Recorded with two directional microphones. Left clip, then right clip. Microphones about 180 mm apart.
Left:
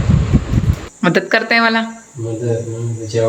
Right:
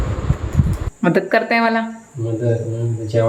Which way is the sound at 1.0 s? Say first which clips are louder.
Left 2 dB; centre (ahead or behind).